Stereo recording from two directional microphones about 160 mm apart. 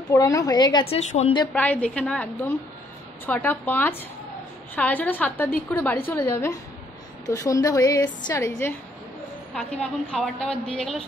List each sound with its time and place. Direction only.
0.1 s a woman's voice: 20° left (ahead or behind)
0.8 s a woman's voice: 40° left (ahead or behind)
1.5 s a woman's voice: 10° left (ahead or behind)
9.5 s a woman's voice: 5° left (ahead or behind)